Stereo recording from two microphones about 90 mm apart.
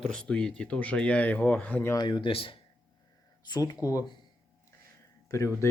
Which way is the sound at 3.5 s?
50° left (ahead or behind).